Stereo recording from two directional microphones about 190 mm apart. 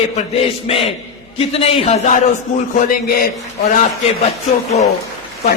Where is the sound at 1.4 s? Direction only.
30° left (ahead or behind).